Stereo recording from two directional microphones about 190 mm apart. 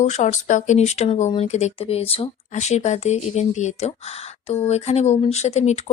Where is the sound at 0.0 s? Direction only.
40° left (ahead or behind).